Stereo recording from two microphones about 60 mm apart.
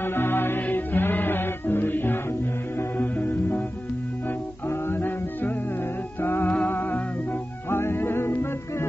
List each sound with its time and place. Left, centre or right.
0.0 s music: left
4.6 s music: left
6.4 s music: left